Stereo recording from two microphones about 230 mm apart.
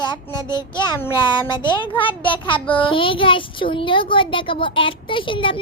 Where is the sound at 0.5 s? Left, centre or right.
Centre.